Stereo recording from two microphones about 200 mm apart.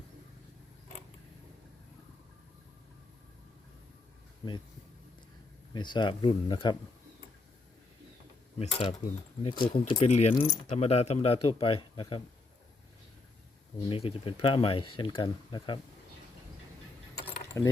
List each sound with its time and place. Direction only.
5.7 s speech: 20° left (ahead or behind)
8.5 s speech: 30° left (ahead or behind)
13.8 s speech: 25° left (ahead or behind)
17.2 s keys jangling: 15° left (ahead or behind)